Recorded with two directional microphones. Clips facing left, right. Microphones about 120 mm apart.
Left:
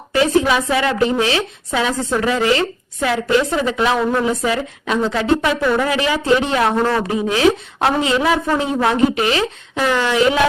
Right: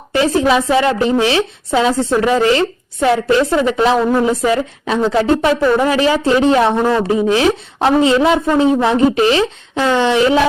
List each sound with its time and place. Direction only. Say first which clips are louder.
0.2 s a woman's voice: right 2 dB; 30° right (ahead or behind)